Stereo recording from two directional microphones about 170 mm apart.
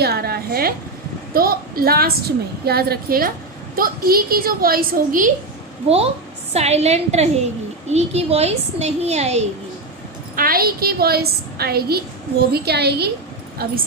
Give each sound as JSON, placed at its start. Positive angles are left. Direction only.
{"t": 0.0, "sound": "a sound", "side_deg": -65}
{"t": 1.3, "sound": "a woman's voice", "side_deg": -60}
{"t": 6.5, "sound": "a child's voice", "side_deg": -40}
{"t": 10.3, "sound": "a woman's voice", "side_deg": -60}
{"t": 13.6, "sound": "a woman's voice", "side_deg": -65}